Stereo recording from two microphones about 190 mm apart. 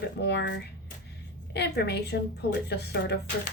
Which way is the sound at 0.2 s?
65° left (ahead or behind).